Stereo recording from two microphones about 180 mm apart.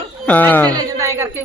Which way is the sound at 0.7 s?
20° right (ahead or behind).